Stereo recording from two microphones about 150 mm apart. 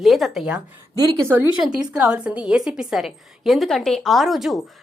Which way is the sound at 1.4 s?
25° left (ahead or behind).